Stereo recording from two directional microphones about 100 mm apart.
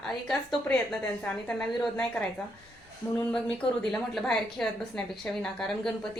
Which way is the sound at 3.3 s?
5° left (ahead or behind).